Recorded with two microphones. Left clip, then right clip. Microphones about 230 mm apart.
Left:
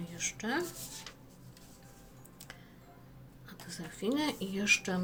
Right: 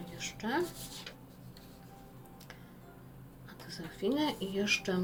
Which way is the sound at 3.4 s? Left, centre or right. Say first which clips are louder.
Even; left.